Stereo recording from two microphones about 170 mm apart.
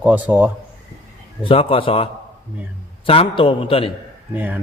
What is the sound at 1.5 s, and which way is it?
Speech, 30° left (ahead or behind).